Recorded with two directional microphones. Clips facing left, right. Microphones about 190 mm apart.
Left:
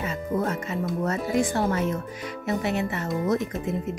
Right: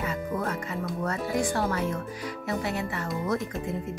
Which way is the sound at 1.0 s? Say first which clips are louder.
Left 3 dB; 20° left (ahead or behind).